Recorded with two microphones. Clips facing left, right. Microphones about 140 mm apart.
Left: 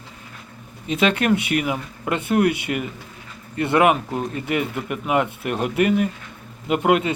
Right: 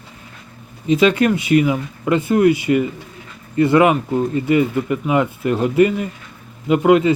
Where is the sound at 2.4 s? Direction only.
60° left (ahead or behind).